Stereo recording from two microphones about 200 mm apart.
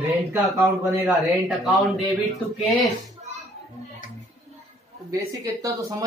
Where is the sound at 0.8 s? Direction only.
15° right (ahead or behind).